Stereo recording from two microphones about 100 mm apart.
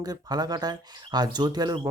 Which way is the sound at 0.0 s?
40° right (ahead or behind).